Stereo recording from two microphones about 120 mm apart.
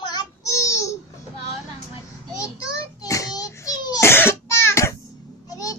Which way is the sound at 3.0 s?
30° left (ahead or behind).